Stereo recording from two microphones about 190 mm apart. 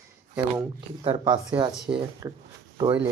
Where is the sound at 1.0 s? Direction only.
25° right (ahead or behind).